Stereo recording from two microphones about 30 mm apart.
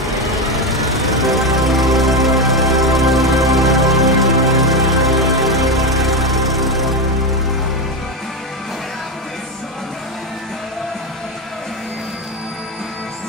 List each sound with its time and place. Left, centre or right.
0.0 s vehicle: centre
1.2 s music: centre